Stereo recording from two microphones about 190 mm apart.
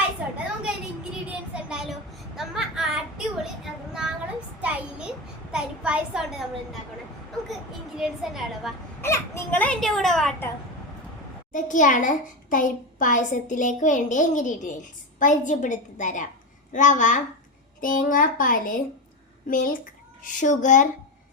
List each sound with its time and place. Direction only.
1.3 s child singing: 5° right (ahead or behind)
7.9 s a woman's voice: centre (ahead or behind)
9.0 s a child's voice: 15° left (ahead or behind)
11.5 s a child's voice: 40° left (ahead or behind)